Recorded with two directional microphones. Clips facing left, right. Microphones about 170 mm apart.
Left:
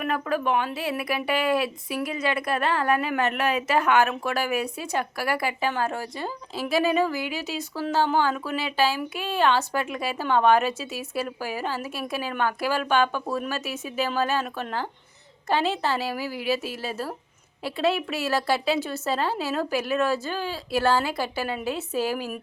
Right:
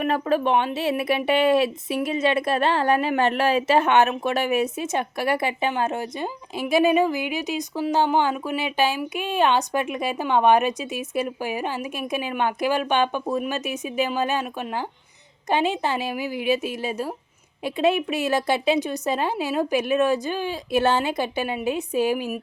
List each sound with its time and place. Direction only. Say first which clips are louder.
0.0 s a woman's voice: right 4 dB; 25° right (ahead or behind)